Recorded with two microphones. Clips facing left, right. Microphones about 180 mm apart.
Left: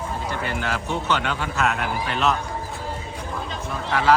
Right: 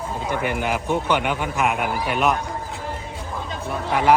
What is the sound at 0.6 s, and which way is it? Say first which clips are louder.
A man's voice: right 4 dB; 15° right (ahead or behind).